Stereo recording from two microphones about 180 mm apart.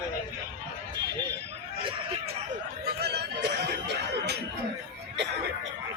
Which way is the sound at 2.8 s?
65° right (ahead or behind).